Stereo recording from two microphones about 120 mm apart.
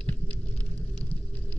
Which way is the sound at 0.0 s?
10° left (ahead or behind).